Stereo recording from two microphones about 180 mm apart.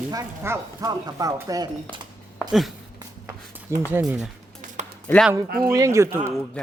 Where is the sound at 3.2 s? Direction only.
10° right (ahead or behind).